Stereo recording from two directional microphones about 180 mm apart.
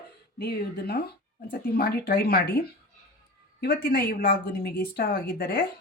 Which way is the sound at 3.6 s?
55° left (ahead or behind).